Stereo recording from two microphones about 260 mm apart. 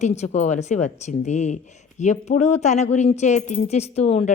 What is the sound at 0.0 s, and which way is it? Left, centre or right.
A woman's voice, left.